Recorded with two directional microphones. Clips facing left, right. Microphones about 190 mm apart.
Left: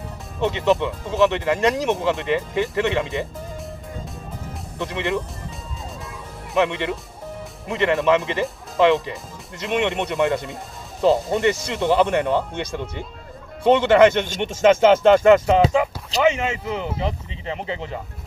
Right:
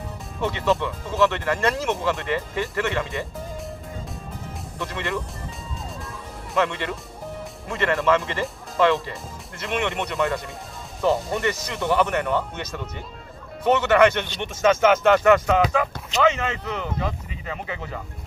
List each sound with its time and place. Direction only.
0.4 s speech: 20° left (ahead or behind)
4.7 s speech: 20° left (ahead or behind)
6.5 s speech: 20° left (ahead or behind)
16.2 s speech: 15° left (ahead or behind)